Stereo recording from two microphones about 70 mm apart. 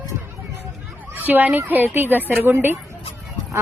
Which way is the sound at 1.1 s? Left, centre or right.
Right.